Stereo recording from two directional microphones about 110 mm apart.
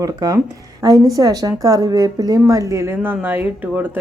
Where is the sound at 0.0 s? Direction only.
35° right (ahead or behind).